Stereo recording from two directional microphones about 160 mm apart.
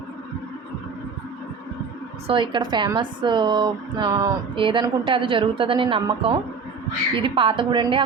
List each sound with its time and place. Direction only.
2.2 s a woman's voice: 30° right (ahead or behind)